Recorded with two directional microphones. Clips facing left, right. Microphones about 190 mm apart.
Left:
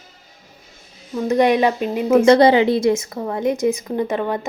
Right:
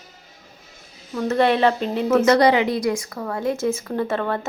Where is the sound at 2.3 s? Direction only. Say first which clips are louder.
Left 5 dB; 25° left (ahead or behind).